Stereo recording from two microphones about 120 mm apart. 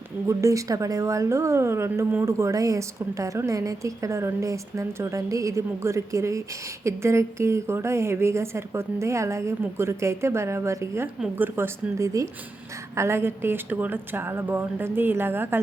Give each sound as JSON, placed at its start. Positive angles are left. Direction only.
{"t": 0.3, "sound": "a woman's voice", "side_deg": -25}